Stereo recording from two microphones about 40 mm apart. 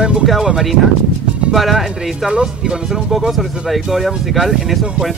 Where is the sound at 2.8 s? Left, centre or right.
Centre.